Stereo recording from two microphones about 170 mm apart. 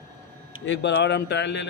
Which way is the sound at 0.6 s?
90° left.